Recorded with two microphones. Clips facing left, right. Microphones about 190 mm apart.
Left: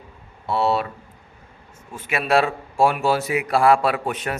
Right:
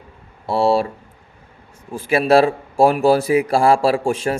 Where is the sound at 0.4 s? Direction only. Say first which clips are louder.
Right 5 dB; 30° right (ahead or behind).